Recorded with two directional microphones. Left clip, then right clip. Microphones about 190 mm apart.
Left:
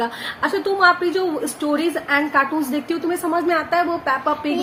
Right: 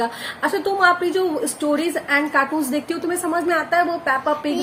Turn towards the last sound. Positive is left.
turn(degrees=-15)  # may be behind; listen again after turning